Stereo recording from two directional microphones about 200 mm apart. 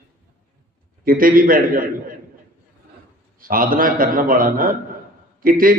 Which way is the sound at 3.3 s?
45° right (ahead or behind).